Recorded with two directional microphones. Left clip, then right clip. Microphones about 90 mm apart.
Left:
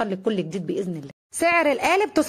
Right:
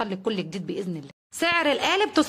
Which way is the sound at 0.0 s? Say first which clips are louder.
Left 3 dB; 30° left (ahead or behind).